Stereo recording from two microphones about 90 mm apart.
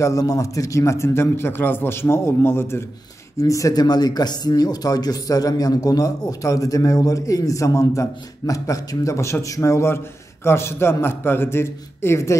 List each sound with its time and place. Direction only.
0.0 s speech: 40° left (ahead or behind)